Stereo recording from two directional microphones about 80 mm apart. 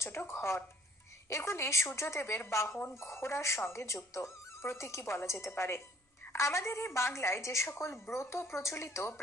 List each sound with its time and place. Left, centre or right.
0.0 s a woman's voice: left